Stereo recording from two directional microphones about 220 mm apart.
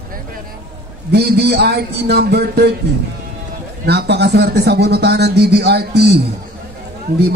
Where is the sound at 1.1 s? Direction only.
45° right (ahead or behind).